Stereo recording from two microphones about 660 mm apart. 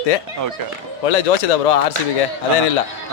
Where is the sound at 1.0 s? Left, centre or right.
Left.